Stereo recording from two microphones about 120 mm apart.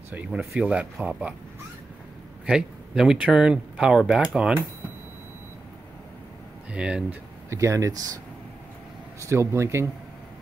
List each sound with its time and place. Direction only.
0.1 s speech: 15° right (ahead or behind)
2.4 s speech: 5° right (ahead or behind)
6.7 s speech: 10° right (ahead or behind)
7.4 s speech: 25° right (ahead or behind)
9.2 s speech: 25° right (ahead or behind)